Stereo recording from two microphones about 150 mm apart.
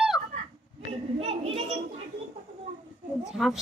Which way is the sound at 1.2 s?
45° right (ahead or behind).